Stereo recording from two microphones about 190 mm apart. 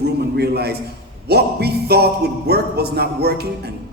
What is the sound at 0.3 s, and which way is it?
A man's voice, 55° right (ahead or behind).